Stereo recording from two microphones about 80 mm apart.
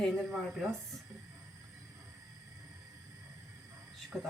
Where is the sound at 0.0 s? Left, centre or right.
Centre.